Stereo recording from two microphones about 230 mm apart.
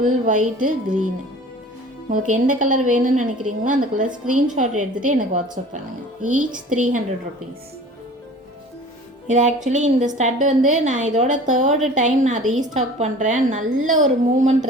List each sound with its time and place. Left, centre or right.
0.0 s a woman's voice: right
2.0 s a woman's voice: right
9.2 s a woman's voice: right